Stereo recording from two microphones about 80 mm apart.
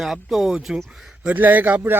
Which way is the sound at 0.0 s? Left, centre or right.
Centre.